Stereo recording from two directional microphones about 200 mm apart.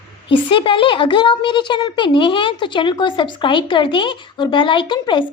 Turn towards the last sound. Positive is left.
turn(degrees=25)  # may be behind; listen again after turning